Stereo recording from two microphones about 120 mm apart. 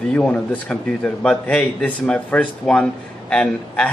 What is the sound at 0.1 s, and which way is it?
A man's voice, 10° left (ahead or behind).